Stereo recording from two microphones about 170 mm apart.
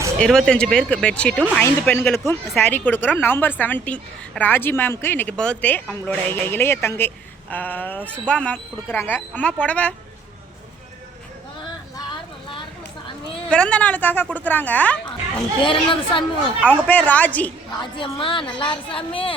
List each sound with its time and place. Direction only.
0.2 s a woman's voice: 5° left (ahead or behind)
13.5 s a woman's voice: 5° left (ahead or behind)
15.0 s speech: 30° left (ahead or behind)
16.6 s a woman's voice: 5° left (ahead or behind)
17.9 s a woman's voice: 30° left (ahead or behind)